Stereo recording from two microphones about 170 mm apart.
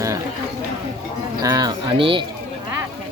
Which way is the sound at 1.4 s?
25° right (ahead or behind).